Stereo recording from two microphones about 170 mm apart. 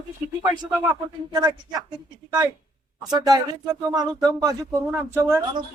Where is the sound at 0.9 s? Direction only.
20° right (ahead or behind).